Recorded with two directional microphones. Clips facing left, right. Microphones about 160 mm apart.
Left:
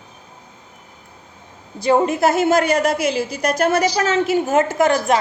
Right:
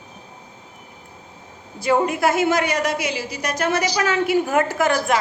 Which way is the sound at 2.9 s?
50° left (ahead or behind).